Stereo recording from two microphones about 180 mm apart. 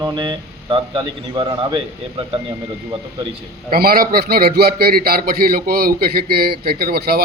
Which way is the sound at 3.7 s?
55° right (ahead or behind).